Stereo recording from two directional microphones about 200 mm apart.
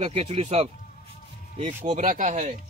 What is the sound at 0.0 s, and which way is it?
Speech, 30° right (ahead or behind).